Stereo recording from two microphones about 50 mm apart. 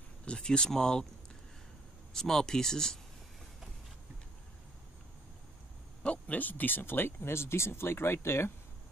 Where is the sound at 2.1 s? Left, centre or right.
Centre.